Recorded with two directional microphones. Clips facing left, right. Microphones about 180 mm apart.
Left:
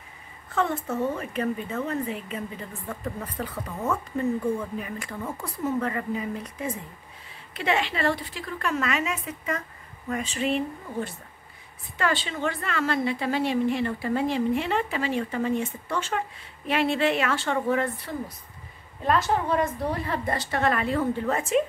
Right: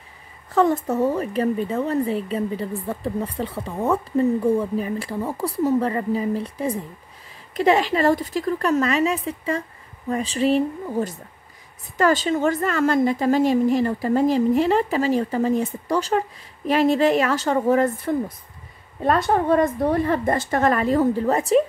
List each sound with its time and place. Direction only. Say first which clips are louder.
0.5 s a woman's voice: right 8 dB; 40° right (ahead or behind)